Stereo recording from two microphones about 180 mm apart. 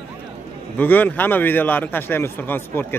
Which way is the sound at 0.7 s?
10° left (ahead or behind).